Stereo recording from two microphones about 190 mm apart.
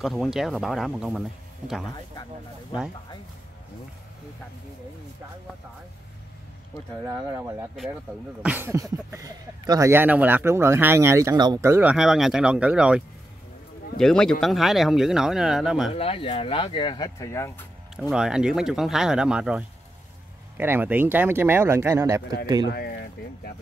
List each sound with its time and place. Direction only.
0.0 s speech: centre (ahead or behind)
7.1 s speech: 15° right (ahead or behind)
15.9 s speech: 30° left (ahead or behind)
18.1 s speech: 5° right (ahead or behind)
22.7 s speech: 55° left (ahead or behind)